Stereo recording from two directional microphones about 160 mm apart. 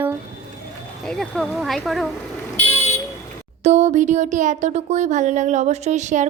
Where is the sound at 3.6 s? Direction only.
45° right (ahead or behind).